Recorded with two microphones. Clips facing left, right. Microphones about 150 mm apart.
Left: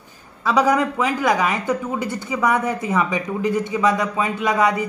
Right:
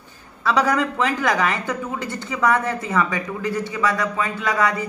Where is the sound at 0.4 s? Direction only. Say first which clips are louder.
Left 2 dB; 15° left (ahead or behind).